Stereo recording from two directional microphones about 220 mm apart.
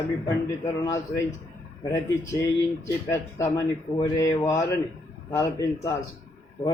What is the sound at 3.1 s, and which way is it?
A man's voice, 15° left (ahead or behind).